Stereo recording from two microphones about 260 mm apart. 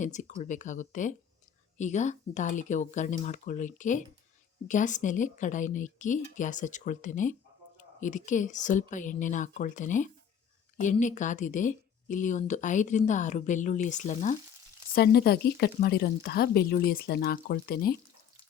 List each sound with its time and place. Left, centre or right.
0.0 s speech: left